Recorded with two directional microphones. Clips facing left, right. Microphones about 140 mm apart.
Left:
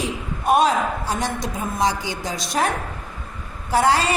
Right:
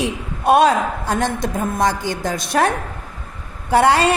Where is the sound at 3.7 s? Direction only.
65° right (ahead or behind).